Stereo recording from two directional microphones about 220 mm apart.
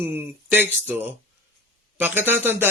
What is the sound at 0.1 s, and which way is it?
Speech, 10° right (ahead or behind).